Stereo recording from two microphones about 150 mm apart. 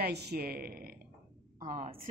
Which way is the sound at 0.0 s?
90° right.